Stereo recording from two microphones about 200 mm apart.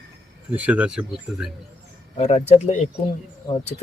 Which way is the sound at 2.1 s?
35° left (ahead or behind).